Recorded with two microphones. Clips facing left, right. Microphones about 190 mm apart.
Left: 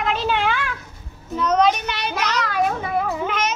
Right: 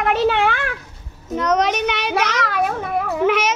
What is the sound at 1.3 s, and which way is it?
A child's voice, 75° right (ahead or behind).